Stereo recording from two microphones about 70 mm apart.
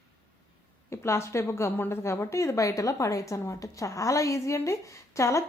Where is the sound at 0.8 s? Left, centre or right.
Left.